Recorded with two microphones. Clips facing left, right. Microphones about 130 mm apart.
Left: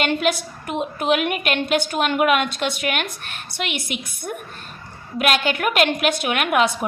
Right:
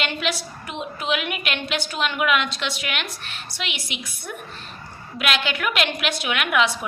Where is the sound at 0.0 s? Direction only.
50° left (ahead or behind).